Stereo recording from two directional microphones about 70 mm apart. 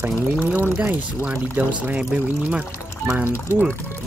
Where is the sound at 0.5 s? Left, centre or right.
Right.